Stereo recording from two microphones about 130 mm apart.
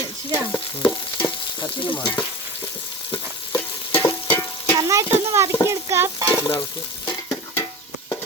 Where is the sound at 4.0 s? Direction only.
15° left (ahead or behind).